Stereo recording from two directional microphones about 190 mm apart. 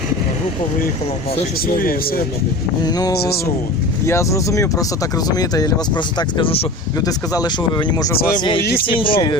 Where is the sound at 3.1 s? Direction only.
55° left (ahead or behind).